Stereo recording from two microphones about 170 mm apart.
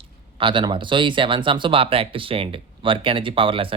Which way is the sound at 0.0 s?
30° right (ahead or behind).